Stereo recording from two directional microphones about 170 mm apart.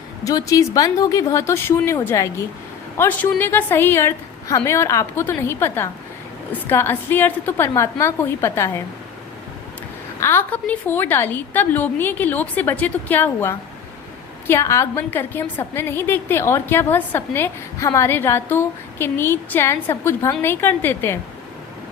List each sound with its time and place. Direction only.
0.3 s a woman's voice: 20° left (ahead or behind)
10.2 s a woman's voice: 15° left (ahead or behind)